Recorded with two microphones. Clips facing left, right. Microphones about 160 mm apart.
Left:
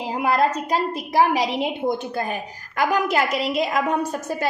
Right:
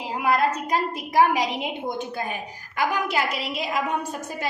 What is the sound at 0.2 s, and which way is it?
A woman's voice, 30° left (ahead or behind).